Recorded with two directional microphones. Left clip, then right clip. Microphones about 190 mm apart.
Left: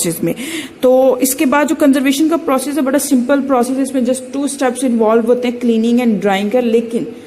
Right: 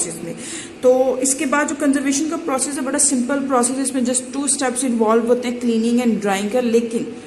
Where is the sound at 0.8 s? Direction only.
45° left (ahead or behind).